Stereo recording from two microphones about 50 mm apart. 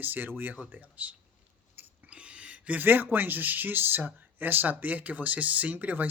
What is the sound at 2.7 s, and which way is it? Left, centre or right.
Speech, right.